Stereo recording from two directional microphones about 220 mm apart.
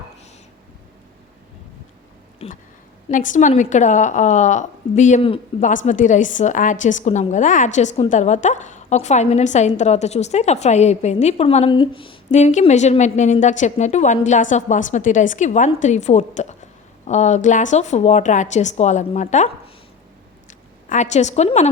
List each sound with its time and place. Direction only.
3.1 s a woman's voice: 35° left (ahead or behind)
20.5 s a woman's voice: 35° left (ahead or behind)